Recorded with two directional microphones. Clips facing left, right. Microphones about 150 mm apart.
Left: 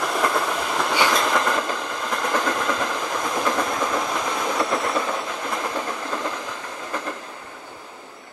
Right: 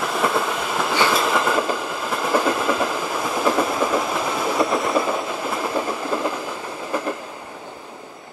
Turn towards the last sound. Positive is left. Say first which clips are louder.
# right 4 dB
turn(degrees=-10)  # may be behind; listen again after turning